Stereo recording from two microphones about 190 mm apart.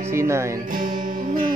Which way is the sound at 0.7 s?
40° right (ahead or behind).